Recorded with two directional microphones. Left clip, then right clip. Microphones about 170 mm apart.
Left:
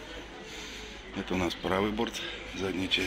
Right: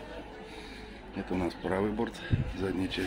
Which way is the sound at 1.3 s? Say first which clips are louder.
Left 2 dB; 5° right (ahead or behind).